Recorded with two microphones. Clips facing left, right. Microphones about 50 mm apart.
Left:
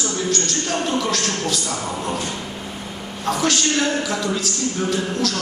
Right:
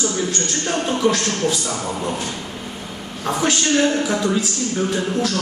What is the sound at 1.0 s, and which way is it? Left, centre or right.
Speech, centre.